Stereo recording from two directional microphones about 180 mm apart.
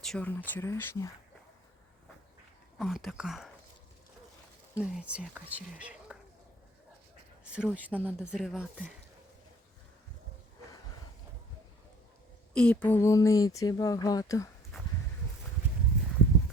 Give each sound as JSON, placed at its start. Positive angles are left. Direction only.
{"t": 0.0, "sound": "speech", "side_deg": 5}
{"t": 2.7, "sound": "speech", "side_deg": 0}
{"t": 4.8, "sound": "speech", "side_deg": -5}
{"t": 7.4, "sound": "speech", "side_deg": -5}
{"t": 12.5, "sound": "speech", "side_deg": 5}